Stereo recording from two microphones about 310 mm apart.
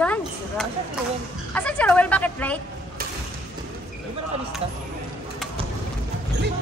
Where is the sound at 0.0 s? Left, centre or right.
Centre.